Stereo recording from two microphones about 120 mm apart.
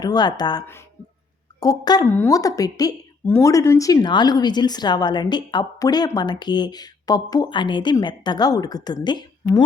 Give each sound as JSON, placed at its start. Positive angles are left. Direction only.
{"t": 0.0, "sound": "speech", "side_deg": 35}
{"t": 1.6, "sound": "speech", "side_deg": 35}
{"t": 2.0, "sound": "speech", "side_deg": 20}